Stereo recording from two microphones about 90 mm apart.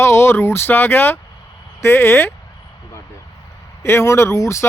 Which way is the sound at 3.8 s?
30° left (ahead or behind).